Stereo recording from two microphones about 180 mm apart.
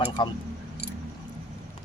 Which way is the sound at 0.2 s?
25° left (ahead or behind).